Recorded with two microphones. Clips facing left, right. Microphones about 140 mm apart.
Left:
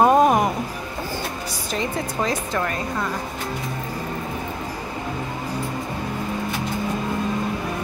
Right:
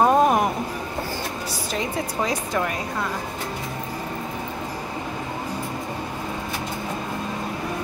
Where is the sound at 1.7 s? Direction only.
5° right (ahead or behind).